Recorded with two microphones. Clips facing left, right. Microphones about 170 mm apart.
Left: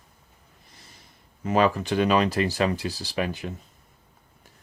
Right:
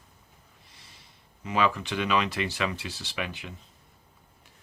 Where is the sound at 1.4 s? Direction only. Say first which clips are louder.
Left 5 dB; 40° left (ahead or behind).